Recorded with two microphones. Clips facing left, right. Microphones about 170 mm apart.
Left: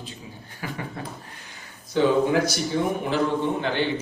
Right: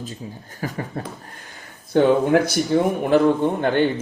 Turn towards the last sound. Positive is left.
turn(degrees=-50)  # may be behind; listen again after turning